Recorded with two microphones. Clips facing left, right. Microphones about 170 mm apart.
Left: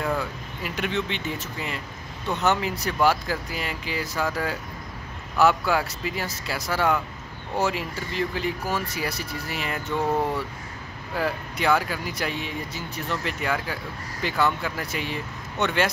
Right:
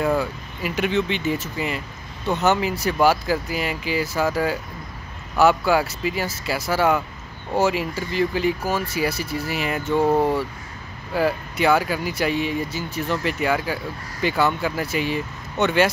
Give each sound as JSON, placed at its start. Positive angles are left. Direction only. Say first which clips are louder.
{"t": 0.0, "sound": "speech", "louder": "right 6 dB", "side_deg": -5}
{"t": 9.9, "sound": "speech", "louder": "right 6 dB", "side_deg": -30}
{"t": 11.1, "sound": "speech", "louder": "right 6 dB", "side_deg": -5}